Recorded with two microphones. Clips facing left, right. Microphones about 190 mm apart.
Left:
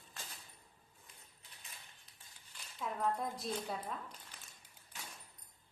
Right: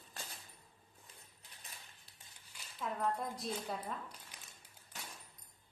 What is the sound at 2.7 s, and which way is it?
Speech, centre (ahead or behind).